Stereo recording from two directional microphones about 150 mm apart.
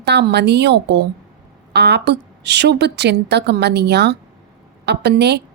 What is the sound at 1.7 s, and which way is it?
A woman's voice, 90° right.